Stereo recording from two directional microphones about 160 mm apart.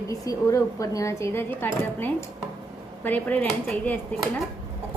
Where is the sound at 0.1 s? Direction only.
20° left (ahead or behind).